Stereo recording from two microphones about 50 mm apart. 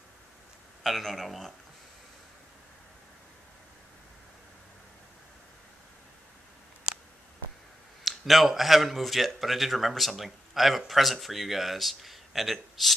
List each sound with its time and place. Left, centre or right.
0.8 s speech: centre
8.0 s speech: centre